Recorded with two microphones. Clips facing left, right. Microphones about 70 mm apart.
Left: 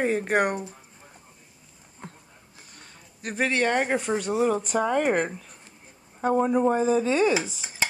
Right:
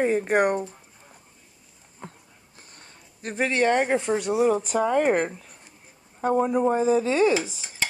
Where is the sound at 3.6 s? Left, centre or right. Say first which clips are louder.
Right 2 dB; centre.